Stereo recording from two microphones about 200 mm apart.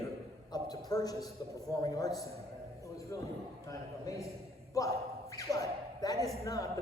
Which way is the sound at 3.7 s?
15° left (ahead or behind).